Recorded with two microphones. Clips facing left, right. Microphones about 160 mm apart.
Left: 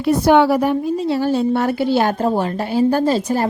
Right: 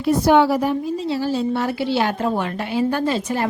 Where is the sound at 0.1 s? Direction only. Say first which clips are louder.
Left 2 dB; 65° left (ahead or behind).